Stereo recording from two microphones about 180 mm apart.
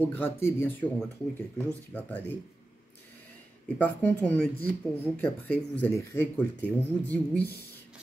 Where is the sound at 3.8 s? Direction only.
10° left (ahead or behind).